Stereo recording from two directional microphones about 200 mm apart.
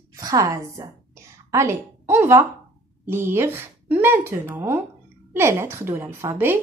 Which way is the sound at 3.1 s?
10° right (ahead or behind).